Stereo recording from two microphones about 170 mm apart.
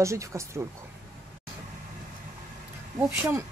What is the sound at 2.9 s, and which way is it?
Speech, 15° right (ahead or behind).